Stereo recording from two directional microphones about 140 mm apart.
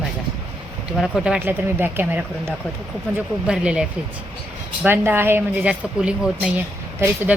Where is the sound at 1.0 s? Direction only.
5° right (ahead or behind).